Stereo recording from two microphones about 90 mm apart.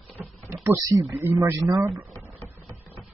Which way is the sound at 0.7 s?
40° right (ahead or behind).